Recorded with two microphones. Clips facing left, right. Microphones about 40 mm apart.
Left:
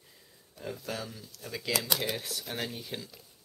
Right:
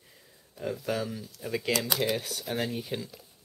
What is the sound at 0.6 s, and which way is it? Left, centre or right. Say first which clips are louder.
Speech: right 6 dB; centre.